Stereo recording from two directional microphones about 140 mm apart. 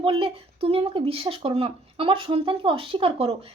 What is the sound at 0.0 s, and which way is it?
Speech, 40° right (ahead or behind).